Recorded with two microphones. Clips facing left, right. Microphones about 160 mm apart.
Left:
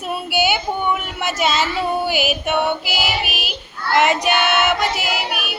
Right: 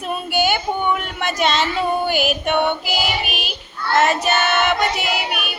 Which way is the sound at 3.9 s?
15° left (ahead or behind).